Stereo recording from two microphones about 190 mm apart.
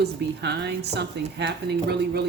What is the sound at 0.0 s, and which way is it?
Speech, 60° right (ahead or behind).